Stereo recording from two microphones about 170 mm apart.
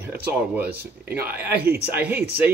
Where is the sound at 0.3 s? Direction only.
65° right (ahead or behind).